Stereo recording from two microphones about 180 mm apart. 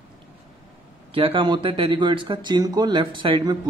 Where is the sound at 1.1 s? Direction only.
30° right (ahead or behind).